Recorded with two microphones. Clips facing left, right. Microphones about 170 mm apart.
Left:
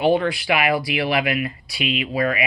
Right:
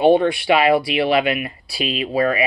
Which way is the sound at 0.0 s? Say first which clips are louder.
Right 4 dB; 25° right (ahead or behind).